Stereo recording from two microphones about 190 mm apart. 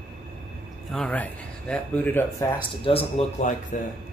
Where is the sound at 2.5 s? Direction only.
30° left (ahead or behind).